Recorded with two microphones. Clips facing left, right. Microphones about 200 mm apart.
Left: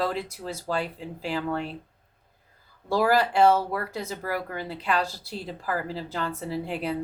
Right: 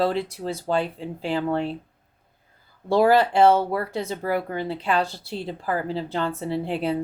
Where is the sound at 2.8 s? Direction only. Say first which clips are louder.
Right 5 dB; 25° right (ahead or behind).